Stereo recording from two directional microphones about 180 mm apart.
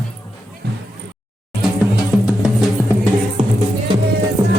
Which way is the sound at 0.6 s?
60° right (ahead or behind).